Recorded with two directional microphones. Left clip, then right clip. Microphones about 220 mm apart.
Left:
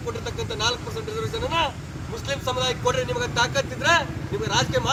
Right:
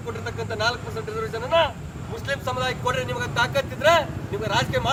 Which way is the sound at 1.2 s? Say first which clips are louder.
Right 3 dB; 10° left (ahead or behind).